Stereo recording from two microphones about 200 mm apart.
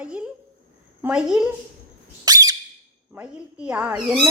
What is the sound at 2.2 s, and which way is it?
Squeak, 20° right (ahead or behind).